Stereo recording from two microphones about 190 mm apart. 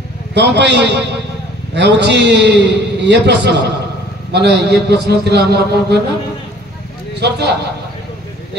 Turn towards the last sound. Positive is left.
turn(degrees=-60)  # may be behind; listen again after turning